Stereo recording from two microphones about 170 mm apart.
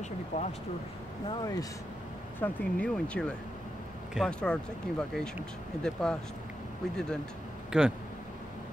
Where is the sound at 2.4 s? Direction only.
5° left (ahead or behind).